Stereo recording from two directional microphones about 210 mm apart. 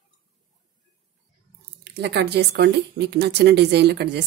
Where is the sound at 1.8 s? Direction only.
55° right (ahead or behind).